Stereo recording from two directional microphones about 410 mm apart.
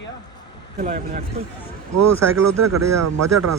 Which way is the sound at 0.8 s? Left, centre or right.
Centre.